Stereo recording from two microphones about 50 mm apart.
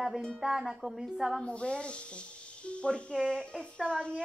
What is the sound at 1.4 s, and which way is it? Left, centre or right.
A child's voice, left.